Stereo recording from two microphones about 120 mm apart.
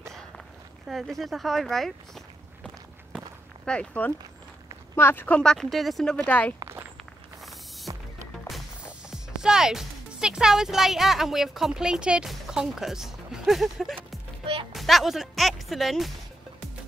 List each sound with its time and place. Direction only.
0.8 s speech: centre (ahead or behind)
6.1 s speech: 10° left (ahead or behind)
6.6 s walk: 20° right (ahead or behind)
7.9 s music: 35° right (ahead or behind)
8.8 s speech: 5° right (ahead or behind)
14.4 s music: 50° right (ahead or behind)
14.7 s speech: centre (ahead or behind)